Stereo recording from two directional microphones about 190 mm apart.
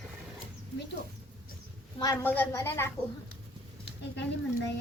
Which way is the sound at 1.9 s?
20° left (ahead or behind).